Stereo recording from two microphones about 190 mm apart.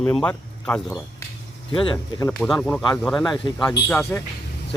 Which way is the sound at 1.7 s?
25° left (ahead or behind).